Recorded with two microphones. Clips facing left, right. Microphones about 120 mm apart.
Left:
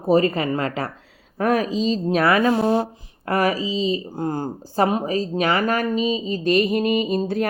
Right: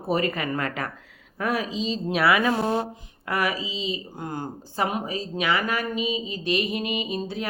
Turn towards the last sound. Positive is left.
turn(degrees=50)  # may be behind; listen again after turning